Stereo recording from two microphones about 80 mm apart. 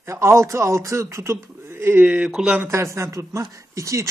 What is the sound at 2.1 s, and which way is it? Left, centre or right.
Speech, centre.